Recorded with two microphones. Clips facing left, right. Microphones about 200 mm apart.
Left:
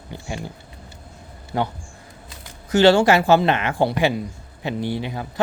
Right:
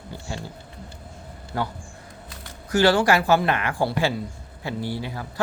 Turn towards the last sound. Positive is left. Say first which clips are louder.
# left 4 dB
turn(degrees=20)  # may be behind; listen again after turning